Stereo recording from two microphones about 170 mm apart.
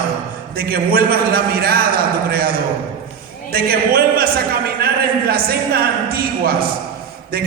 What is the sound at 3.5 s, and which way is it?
Speech, 60° right (ahead or behind).